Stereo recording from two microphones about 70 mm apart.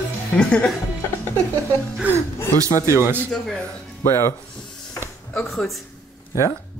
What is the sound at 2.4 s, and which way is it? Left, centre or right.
Speech, left.